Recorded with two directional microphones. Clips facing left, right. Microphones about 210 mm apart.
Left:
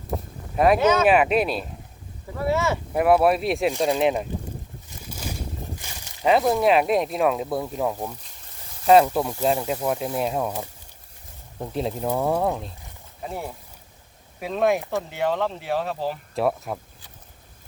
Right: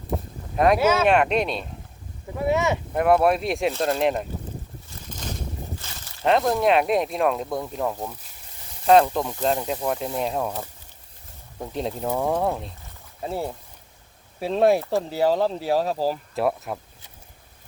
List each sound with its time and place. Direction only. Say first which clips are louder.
0.5 s speech: left 1 dB; centre (ahead or behind)
0.8 s speech: left 1 dB; 10° right (ahead or behind)
1.0 s speech: left 1 dB; 5° left (ahead or behind)
2.4 s speech: right 1 dB; 20° right (ahead or behind)
2.9 s speech: left 1 dB; 5° left (ahead or behind)
3.7 s speech: left 1 dB; 15° left (ahead or behind)
3.9 s speech: left 1 dB; centre (ahead or behind)
5.0 s a sound: left 1 dB; 10° left (ahead or behind)
6.2 s speech: left 1 dB; 5° left (ahead or behind)
13.2 s speech: right 4 dB; 30° right (ahead or behind)
16.3 s speech: even; centre (ahead or behind)